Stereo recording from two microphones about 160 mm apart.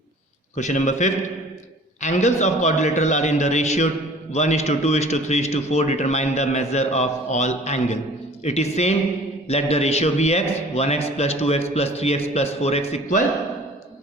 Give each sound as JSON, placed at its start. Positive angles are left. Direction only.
{"t": 0.5, "sound": "a man's voice", "side_deg": 50}